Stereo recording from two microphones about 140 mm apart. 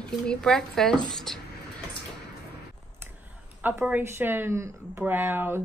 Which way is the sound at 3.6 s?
15° right (ahead or behind).